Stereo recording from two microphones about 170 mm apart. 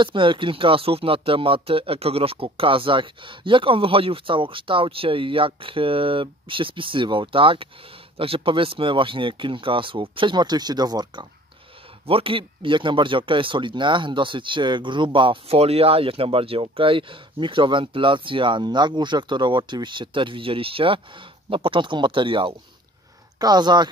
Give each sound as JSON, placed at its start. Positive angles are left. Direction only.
{"t": 0.0, "sound": "speech", "side_deg": -30}